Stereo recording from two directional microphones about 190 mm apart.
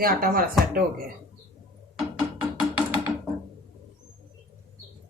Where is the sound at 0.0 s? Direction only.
50° right (ahead or behind).